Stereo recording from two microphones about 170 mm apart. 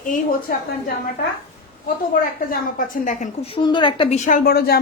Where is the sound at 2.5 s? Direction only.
50° left (ahead or behind).